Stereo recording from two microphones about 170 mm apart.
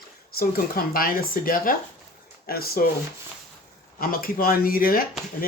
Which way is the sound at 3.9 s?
60° left (ahead or behind).